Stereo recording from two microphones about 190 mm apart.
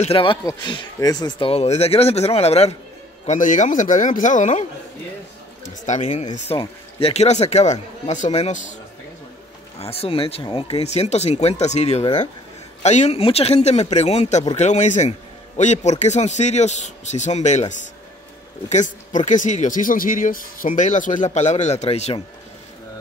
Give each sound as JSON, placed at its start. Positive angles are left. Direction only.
{"t": 0.0, "sound": "speech", "side_deg": 30}
{"t": 9.8, "sound": "speech", "side_deg": 30}